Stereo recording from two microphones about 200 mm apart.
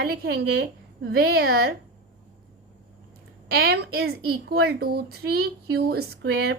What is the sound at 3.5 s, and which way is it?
A woman's voice, 50° right (ahead or behind).